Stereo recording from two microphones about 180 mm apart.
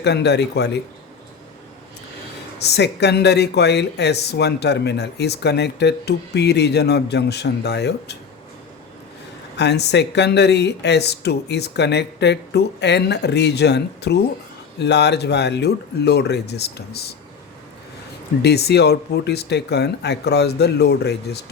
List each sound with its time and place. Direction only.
0.0 s speech: 70° left (ahead or behind)
2.6 s speech: 65° left (ahead or behind)
9.6 s speech: 70° left (ahead or behind)
18.4 s speech: 65° left (ahead or behind)